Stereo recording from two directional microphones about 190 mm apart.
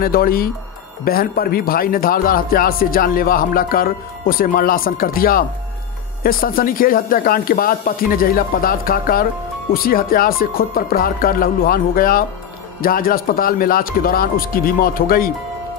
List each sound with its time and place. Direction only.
0.0 s speech: 50° left (ahead or behind)